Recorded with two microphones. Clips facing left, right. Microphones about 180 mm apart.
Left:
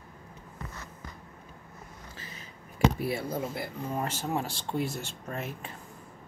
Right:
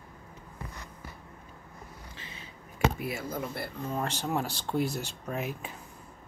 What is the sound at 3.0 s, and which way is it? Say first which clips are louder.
Speech: left 3 dB; 30° left (ahead or behind).